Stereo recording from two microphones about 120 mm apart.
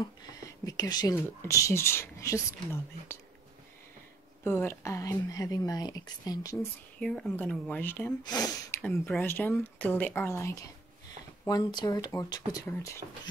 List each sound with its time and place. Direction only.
0.7 s speech: 30° left (ahead or behind)
4.5 s speech: 20° left (ahead or behind)
7.0 s speech: 5° left (ahead or behind)
8.2 s speech: 35° left (ahead or behind)
8.7 s a sound: 20° left (ahead or behind)
9.2 s speech: 15° left (ahead or behind)
11.4 s speech: 35° left (ahead or behind)